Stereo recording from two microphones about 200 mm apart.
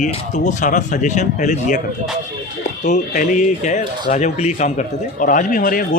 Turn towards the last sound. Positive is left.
turn(degrees=45)  # may be behind; listen again after turning